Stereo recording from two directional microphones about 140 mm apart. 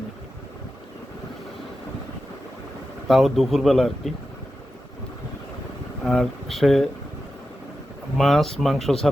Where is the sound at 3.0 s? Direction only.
Centre (ahead or behind).